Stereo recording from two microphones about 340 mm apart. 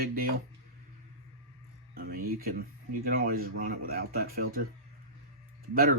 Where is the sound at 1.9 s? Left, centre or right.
Right.